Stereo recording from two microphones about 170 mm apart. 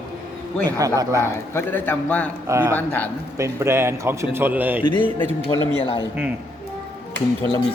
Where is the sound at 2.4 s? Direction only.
15° right (ahead or behind).